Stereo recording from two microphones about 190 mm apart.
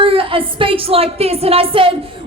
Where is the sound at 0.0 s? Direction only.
30° right (ahead or behind).